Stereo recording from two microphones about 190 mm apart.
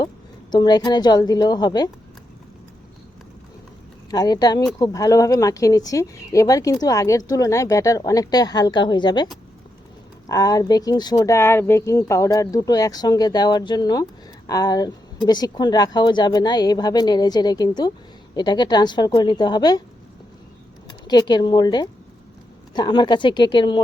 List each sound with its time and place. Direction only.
0.5 s speech: 20° left (ahead or behind)
4.1 s speech: 20° left (ahead or behind)
20.8 s speech: 20° left (ahead or behind)